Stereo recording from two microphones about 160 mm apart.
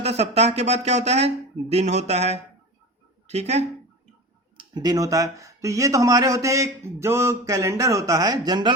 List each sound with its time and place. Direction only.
0.0 s speech: 40° right (ahead or behind)
4.5 s speech: 25° right (ahead or behind)